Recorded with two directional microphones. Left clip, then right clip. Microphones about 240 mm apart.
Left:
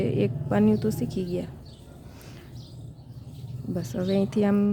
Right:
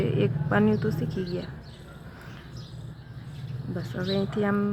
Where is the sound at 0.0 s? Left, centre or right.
Left.